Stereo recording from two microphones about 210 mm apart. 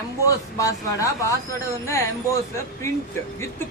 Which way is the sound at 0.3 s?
15° left (ahead or behind).